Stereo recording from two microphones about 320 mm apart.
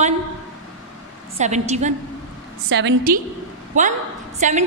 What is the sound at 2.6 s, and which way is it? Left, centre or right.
A woman's voice, right.